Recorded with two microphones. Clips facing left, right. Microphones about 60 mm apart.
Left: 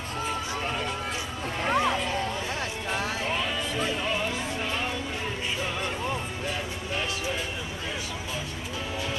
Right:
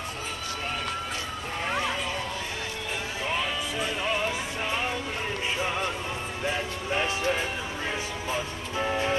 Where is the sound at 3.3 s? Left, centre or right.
Centre.